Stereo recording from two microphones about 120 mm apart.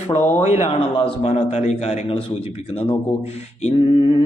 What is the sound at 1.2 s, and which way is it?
Speech, 60° left (ahead or behind).